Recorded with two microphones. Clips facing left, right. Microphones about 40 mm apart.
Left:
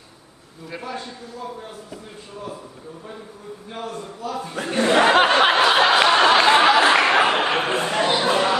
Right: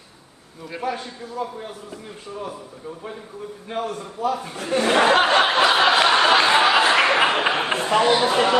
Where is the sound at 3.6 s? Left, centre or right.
Right.